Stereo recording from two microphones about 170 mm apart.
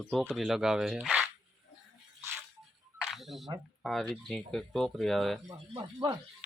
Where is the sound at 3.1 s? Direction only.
Centre (ahead or behind).